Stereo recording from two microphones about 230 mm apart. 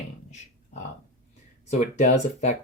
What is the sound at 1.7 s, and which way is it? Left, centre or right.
Speech, left.